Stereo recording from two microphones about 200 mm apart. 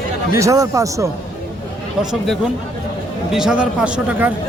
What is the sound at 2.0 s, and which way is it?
A man's voice, centre (ahead or behind).